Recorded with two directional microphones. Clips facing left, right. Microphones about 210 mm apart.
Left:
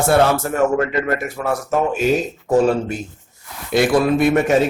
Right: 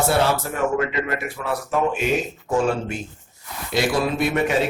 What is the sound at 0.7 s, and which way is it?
A man's voice, 45° left (ahead or behind).